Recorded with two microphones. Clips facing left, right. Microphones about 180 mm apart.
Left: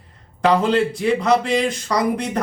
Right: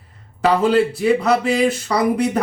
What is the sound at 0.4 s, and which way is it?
Speech, 5° right (ahead or behind).